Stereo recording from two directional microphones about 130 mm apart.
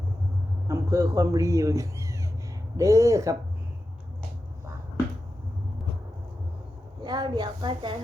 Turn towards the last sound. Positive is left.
turn(degrees=-35)  # may be behind; listen again after turning